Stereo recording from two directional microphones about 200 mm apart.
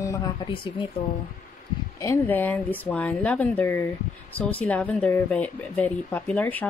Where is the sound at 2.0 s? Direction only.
10° left (ahead or behind).